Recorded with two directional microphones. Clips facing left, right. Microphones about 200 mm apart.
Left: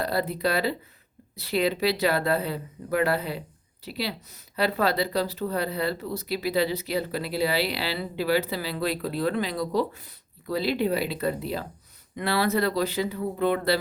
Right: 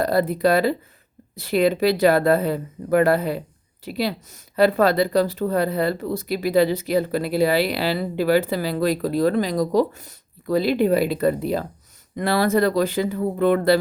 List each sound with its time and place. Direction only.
0.0 s speech: 45° right (ahead or behind)